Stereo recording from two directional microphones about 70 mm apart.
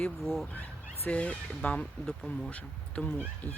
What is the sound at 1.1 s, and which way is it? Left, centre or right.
Speech, centre.